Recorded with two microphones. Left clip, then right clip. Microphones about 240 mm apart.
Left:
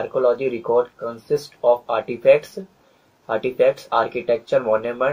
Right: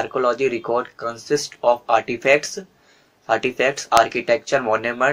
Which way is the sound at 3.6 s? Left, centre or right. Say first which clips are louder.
Even; right.